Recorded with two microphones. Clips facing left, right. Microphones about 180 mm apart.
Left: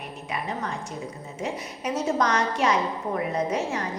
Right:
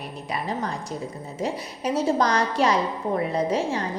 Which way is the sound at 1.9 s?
35° right (ahead or behind).